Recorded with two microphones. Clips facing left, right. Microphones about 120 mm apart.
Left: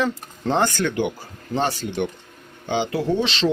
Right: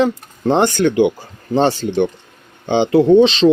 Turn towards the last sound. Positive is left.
turn(degrees=-20)  # may be behind; listen again after turning